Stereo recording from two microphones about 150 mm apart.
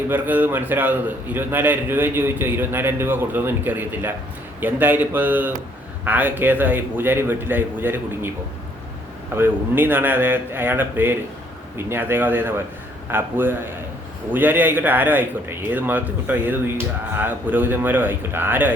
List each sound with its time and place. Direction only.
0.1 s speech: 10° right (ahead or behind)
9.3 s speech: 15° right (ahead or behind)